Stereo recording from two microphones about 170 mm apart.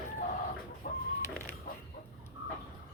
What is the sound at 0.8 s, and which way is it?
Chicken, 50° left (ahead or behind).